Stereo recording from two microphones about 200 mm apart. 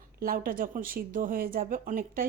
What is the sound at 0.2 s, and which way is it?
A woman's voice, 45° right (ahead or behind).